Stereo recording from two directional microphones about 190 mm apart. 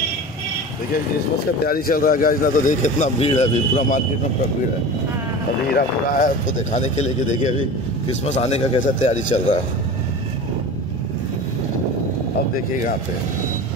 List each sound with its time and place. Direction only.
1.6 s a man's voice: 50° left (ahead or behind)
6.1 s a man's voice: 40° left (ahead or behind)